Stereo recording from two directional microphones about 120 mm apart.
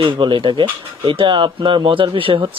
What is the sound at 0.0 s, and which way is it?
Speech, 45° right (ahead or behind).